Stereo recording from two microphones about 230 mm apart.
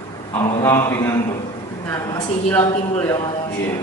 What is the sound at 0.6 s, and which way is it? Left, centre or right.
A man's voice, centre.